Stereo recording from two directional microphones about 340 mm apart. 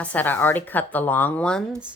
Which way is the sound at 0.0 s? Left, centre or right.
Centre.